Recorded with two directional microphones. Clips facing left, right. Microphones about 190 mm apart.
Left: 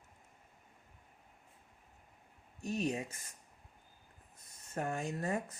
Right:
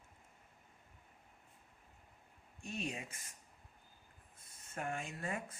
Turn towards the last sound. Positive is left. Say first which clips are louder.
# left 6 dB
turn(degrees=40)  # may be behind; listen again after turning